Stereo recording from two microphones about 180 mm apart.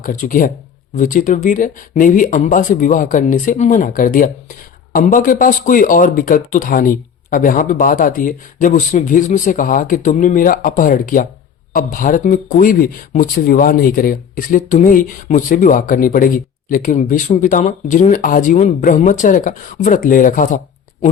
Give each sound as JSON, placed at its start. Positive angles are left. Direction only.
{"t": 0.0, "sound": "speech", "side_deg": 50}